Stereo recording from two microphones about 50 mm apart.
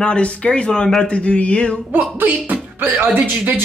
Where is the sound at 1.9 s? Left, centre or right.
Right.